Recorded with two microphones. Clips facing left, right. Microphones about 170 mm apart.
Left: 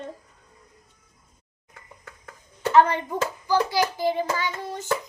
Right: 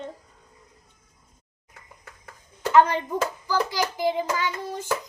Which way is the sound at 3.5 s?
15° right (ahead or behind).